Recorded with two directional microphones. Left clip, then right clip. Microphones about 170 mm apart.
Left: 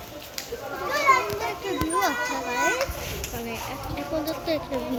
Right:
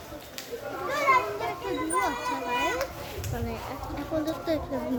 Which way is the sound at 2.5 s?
10° left (ahead or behind).